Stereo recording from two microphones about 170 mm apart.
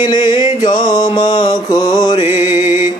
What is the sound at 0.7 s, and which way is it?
Mantra, 25° left (ahead or behind).